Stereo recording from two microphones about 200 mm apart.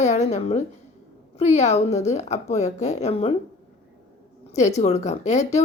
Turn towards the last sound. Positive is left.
turn(degrees=35)  # may be behind; listen again after turning